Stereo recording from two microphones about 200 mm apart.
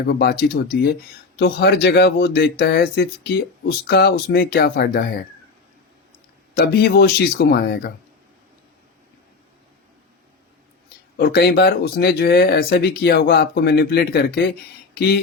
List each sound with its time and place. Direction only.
0.1 s speech: 50° left (ahead or behind)
6.5 s speech: 50° left (ahead or behind)
11.2 s speech: 55° left (ahead or behind)
14.9 s a sound: 55° left (ahead or behind)